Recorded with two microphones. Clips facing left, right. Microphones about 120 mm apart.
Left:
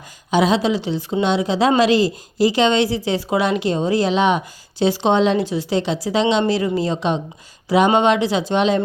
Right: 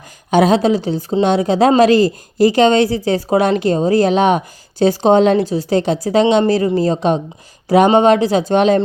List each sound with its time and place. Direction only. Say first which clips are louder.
0.3 s a woman's voice: right 5 dB; 50° right (ahead or behind)